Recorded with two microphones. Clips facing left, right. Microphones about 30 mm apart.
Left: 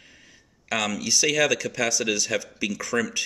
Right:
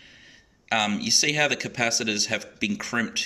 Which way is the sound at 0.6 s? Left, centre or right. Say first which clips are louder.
Right 2 dB; right.